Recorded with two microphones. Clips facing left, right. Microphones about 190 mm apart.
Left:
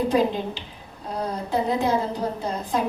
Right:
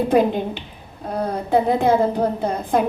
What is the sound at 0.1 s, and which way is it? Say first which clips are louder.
A woman's voice: right 4 dB; 55° right (ahead or behind).